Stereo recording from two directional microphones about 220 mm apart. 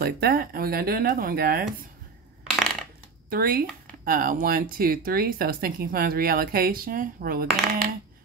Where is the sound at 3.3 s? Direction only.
40° right (ahead or behind).